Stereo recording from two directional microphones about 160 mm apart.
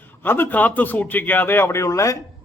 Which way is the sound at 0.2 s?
10° left (ahead or behind).